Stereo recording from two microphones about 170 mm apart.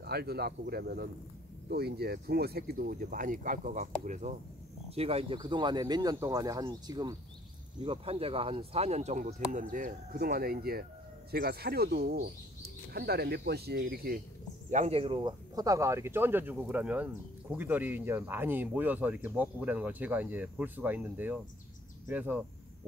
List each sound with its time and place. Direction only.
0.0 s speech: 65° right (ahead or behind); by 4.4 s 45° right (ahead or behind)
4.8 s speech: 35° right (ahead or behind)
7.8 s speech: 35° right (ahead or behind); by 14.2 s 60° right (ahead or behind)
14.7 s speech: 40° right (ahead or behind); by 22.4 s 10° right (ahead or behind)